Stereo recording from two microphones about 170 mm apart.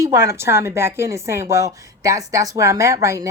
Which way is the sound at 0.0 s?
15° right (ahead or behind).